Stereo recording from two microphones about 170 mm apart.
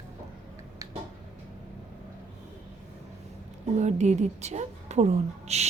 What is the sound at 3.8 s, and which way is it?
A woman's voice, 45° right (ahead or behind).